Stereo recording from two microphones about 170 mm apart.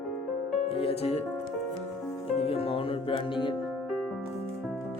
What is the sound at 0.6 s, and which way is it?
Speech, 35° left (ahead or behind).